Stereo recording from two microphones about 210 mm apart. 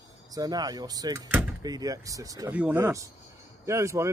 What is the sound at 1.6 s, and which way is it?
Speech, 15° right (ahead or behind).